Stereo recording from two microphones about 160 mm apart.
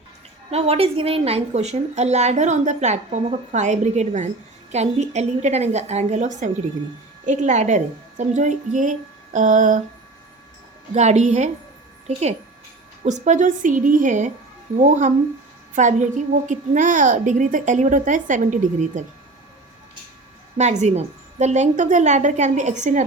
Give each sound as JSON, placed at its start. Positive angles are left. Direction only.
{"t": 0.5, "sound": "a woman's voice", "side_deg": -40}
{"t": 10.9, "sound": "a woman's voice", "side_deg": -45}
{"t": 13.1, "sound": "a woman's voice", "side_deg": -45}
{"t": 20.6, "sound": "a woman's voice", "side_deg": -45}